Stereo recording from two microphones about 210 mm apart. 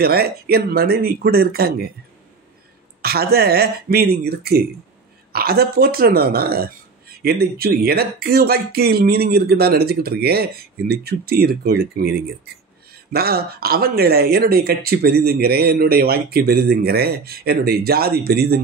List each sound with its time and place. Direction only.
0.0 s speech: 50° right (ahead or behind)
3.0 s speech: 50° right (ahead or behind)
13.1 s speech: 45° right (ahead or behind)